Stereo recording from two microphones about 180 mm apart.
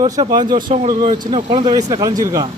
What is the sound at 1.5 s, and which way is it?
Speech, 25° right (ahead or behind).